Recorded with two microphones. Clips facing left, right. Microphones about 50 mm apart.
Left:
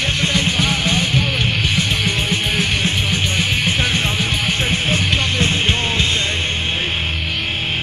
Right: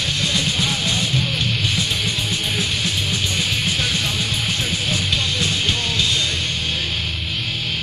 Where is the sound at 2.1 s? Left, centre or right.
Left.